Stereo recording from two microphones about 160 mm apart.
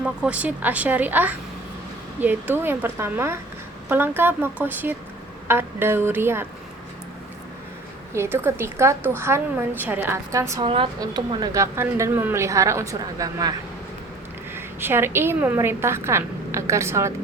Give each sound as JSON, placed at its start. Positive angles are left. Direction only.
{"t": 0.0, "sound": "a woman's voice", "side_deg": -5}
{"t": 8.1, "sound": "a woman's voice", "side_deg": -15}
{"t": 10.6, "sound": "a woman's voice", "side_deg": -30}
{"t": 14.5, "sound": "a woman's voice", "side_deg": -15}